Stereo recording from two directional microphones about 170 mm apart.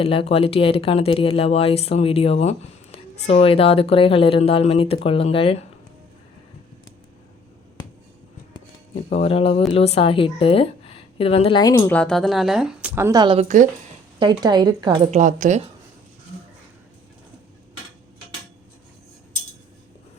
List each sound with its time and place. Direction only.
0.0 s speech: 35° left (ahead or behind)
9.0 s speech: 35° left (ahead or behind)
11.9 s speech: 5° left (ahead or behind); by 13.2 s 15° right (ahead or behind)
13.2 s speech: 35° right (ahead or behind)
15.1 s a woman's voice: 50° right (ahead or behind)